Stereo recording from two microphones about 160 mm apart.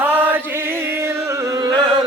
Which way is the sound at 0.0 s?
10° right (ahead or behind).